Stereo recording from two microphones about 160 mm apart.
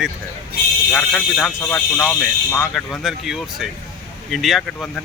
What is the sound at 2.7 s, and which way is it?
Speech, centre (ahead or behind).